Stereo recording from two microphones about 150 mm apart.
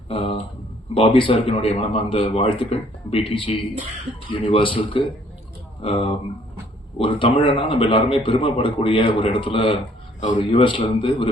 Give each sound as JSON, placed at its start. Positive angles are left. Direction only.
{"t": 0.1, "sound": "a man's voice", "side_deg": 40}